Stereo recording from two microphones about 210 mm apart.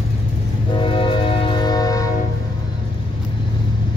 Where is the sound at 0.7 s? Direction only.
25° left (ahead or behind).